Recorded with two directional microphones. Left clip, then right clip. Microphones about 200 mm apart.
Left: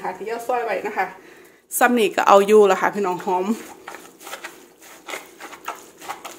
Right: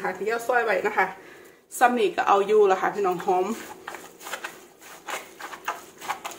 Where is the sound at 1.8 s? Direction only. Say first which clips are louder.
Left 4 dB; 50° left (ahead or behind).